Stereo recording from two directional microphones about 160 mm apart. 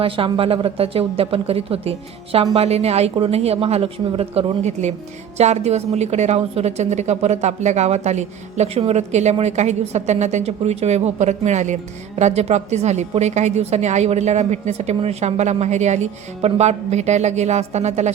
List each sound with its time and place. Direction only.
0.0 s a woman's voice: 35° right (ahead or behind)